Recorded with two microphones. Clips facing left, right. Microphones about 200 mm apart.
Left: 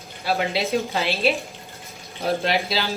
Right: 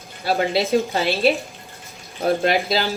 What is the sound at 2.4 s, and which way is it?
Speech, 50° right (ahead or behind).